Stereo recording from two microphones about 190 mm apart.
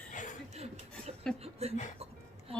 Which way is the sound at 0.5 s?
35° right (ahead or behind).